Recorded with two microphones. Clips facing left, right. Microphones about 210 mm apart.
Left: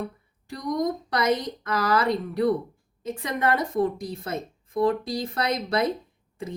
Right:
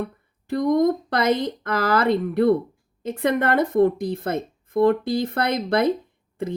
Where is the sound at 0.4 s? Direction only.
55° right (ahead or behind).